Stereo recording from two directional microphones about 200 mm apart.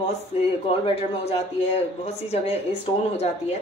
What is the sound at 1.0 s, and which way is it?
Speech, 30° left (ahead or behind).